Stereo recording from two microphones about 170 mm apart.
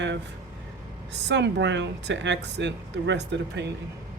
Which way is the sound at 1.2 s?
90° right.